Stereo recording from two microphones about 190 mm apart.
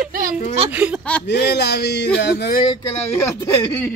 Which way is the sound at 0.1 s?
45° right (ahead or behind).